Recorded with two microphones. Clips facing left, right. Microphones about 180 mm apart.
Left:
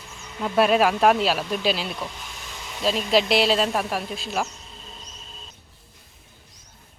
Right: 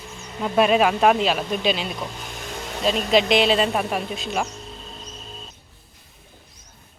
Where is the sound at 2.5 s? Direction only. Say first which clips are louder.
Right 9 dB; 55° right (ahead or behind).